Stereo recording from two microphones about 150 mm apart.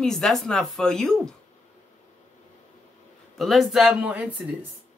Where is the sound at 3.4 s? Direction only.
Centre (ahead or behind).